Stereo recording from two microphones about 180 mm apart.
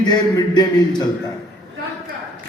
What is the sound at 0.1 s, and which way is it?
Speech, 20° left (ahead or behind).